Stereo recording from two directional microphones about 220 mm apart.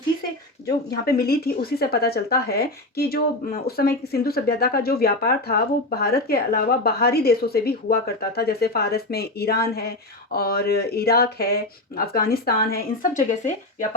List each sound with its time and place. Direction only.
1.1 s speech: 45° left (ahead or behind)